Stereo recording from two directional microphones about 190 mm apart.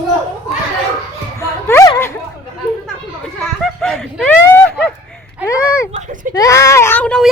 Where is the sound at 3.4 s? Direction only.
Centre (ahead or behind).